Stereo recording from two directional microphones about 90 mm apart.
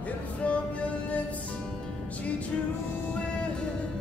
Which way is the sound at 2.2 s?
15° left (ahead or behind).